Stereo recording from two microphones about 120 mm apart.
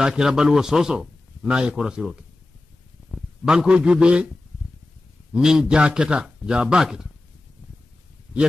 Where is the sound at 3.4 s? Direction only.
5° right (ahead or behind).